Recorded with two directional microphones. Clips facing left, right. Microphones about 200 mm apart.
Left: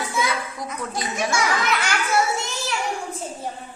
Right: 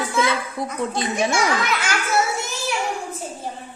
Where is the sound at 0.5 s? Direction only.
30° right (ahead or behind).